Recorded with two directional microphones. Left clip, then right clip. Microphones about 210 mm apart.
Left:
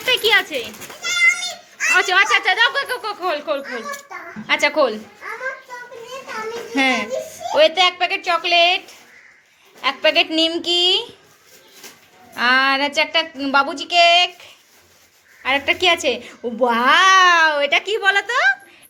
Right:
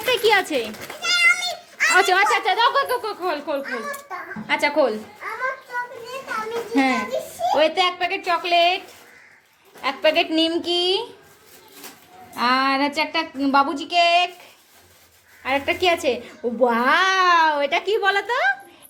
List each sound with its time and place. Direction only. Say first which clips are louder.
0.0 s speech: left 2 dB; 15° right (ahead or behind)
0.4 s a child's voice: right 2 dB; 25° right (ahead or behind)
1.0 s a sound: left 1 dB; 20° right (ahead or behind)
2.2 s a child's voice: left 2 dB; 10° right (ahead or behind)
6.7 s speech: left 3 dB; centre (ahead or behind)
9.8 s a child's voice: left 3 dB; 5° right (ahead or behind)
12.4 s speech: left 3 dB; 5° right (ahead or behind)